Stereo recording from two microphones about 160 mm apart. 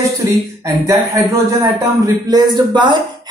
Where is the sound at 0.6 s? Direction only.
20° right (ahead or behind).